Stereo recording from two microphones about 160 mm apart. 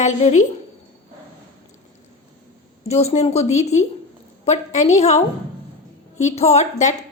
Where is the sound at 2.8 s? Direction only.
40° left (ahead or behind).